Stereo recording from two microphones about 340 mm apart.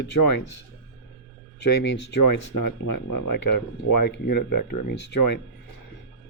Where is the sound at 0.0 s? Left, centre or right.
Left.